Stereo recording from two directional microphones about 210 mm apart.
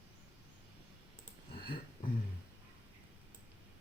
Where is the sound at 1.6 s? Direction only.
25° left (ahead or behind).